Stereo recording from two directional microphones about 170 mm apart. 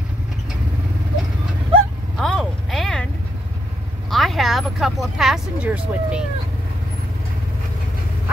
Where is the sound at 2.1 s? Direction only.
Centre (ahead or behind).